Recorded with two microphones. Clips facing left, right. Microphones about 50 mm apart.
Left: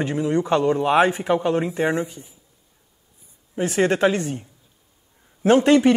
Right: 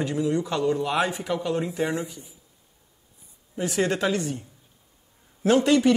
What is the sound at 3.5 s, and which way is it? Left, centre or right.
A man's voice, left.